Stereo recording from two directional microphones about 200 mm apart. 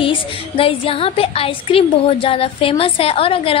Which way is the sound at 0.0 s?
25° left (ahead or behind).